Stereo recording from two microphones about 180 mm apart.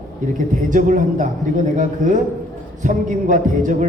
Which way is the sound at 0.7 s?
45° right (ahead or behind).